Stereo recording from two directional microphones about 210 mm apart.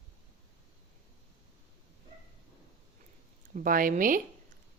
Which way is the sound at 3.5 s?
40° right (ahead or behind).